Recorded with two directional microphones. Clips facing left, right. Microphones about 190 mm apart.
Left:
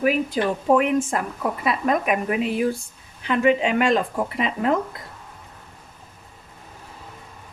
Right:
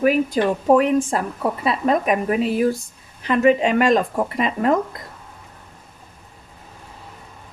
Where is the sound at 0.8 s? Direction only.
35° right (ahead or behind).